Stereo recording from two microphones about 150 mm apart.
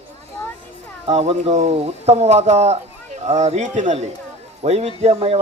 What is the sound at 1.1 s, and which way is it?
A man's voice, 45° right (ahead or behind).